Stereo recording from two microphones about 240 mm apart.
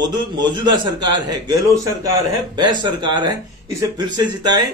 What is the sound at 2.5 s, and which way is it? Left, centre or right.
A man's voice, centre.